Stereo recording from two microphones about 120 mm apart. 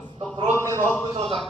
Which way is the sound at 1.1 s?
50° right (ahead or behind).